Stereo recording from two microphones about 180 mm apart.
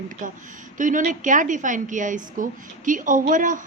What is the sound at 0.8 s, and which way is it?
A woman's voice, 45° right (ahead or behind).